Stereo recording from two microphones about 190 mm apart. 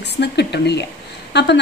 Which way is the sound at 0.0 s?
65° left (ahead or behind).